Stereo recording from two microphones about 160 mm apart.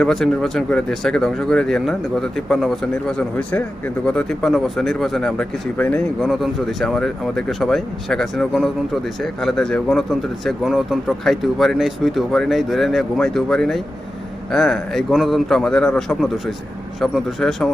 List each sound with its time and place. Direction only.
0.0 s speech: centre (ahead or behind)
6.2 s speech: centre (ahead or behind)